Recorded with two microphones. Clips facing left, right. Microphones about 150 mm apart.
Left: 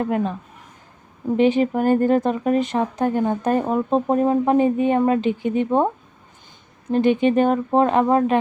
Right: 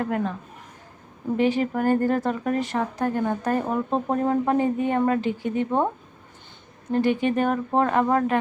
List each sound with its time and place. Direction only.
0.0 s speech: 20° left (ahead or behind)
1.4 s speech: 20° left (ahead or behind)
6.9 s speech: 20° left (ahead or behind)